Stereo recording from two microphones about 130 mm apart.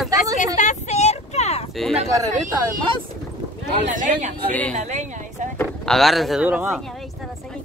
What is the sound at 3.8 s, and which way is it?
Speech, 75° right (ahead or behind).